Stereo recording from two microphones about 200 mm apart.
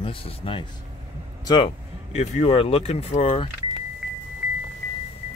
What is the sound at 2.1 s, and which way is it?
Speech, 30° left (ahead or behind).